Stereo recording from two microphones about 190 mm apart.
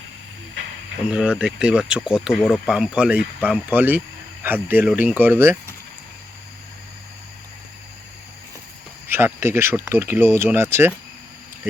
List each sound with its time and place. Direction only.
1.0 s speech: 5° right (ahead or behind)
9.0 s speech: 10° right (ahead or behind)